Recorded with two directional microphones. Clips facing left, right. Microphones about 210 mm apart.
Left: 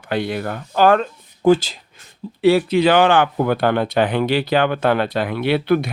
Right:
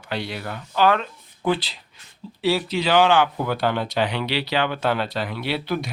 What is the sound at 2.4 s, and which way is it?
Speech, 55° left (ahead or behind).